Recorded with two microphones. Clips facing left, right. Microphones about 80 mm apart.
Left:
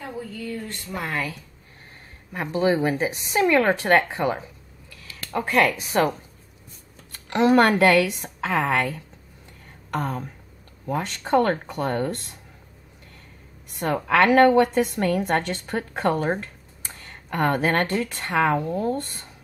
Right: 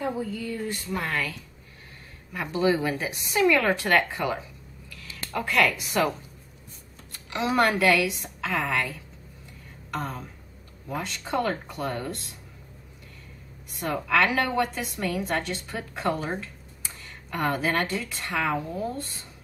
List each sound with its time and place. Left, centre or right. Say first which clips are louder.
0.7 s speech: right 4 dB; centre
0.9 s speech: left 2 dB; centre
2.3 s speech: left 2 dB; left
7.2 s a woman's voice: left 6 dB; left
13.7 s a woman's voice: left 4 dB; left